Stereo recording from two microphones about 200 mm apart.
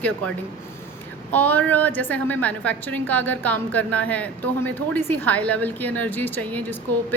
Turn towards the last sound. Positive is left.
turn(degrees=10)  # may be behind; listen again after turning